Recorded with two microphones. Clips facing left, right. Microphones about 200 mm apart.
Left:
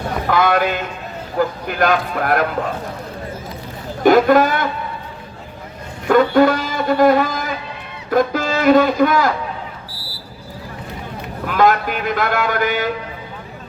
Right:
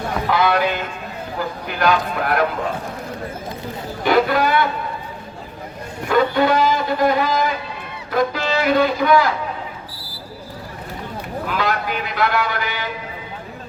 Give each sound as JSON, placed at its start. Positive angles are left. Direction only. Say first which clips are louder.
{"t": 0.3, "sound": "speech", "louder": "left 2 dB", "side_deg": 50}
{"t": 4.0, "sound": "a man's voice", "louder": "left 5 dB", "side_deg": 45}
{"t": 6.1, "sound": "a sound", "louder": "left 4 dB", "side_deg": 50}
{"t": 8.1, "sound": "a man's voice", "louder": "left 3 dB", "side_deg": 45}
{"t": 11.4, "sound": "a man's voice", "louder": "left 7 dB", "side_deg": 50}